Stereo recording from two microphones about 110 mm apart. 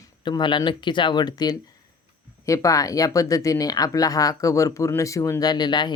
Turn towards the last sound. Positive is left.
turn(degrees=40)  # may be behind; listen again after turning